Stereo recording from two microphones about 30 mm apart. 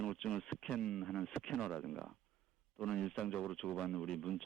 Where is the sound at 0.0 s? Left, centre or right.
Centre.